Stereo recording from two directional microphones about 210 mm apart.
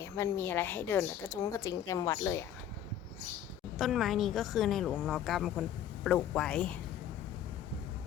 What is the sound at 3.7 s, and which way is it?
A woman's voice, centre (ahead or behind).